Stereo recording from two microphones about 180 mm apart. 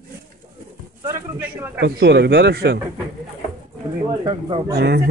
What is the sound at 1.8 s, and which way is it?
Speech, 65° right (ahead or behind).